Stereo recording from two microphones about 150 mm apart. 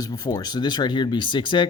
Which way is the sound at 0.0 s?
25° left (ahead or behind).